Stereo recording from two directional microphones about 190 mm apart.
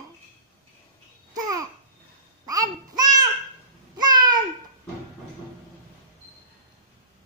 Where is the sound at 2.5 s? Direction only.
20° right (ahead or behind).